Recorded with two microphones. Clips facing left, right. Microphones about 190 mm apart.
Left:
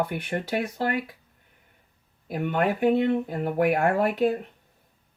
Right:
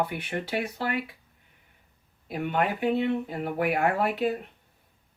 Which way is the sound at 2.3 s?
50° left (ahead or behind).